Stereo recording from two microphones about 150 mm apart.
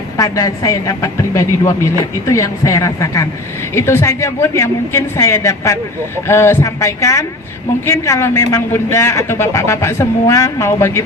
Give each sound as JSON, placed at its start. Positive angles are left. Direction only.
{"t": 0.2, "sound": "a man's voice", "side_deg": 25}